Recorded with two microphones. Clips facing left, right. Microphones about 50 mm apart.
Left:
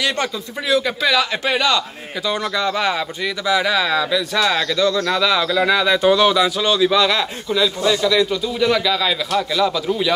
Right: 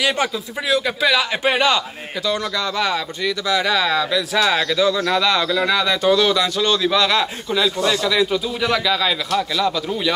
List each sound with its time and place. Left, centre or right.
0.0 s speech: centre
1.4 s a man's voice: right
2.2 s a man's voice: centre